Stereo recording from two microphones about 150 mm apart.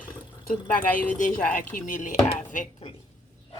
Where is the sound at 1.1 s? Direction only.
60° left (ahead or behind).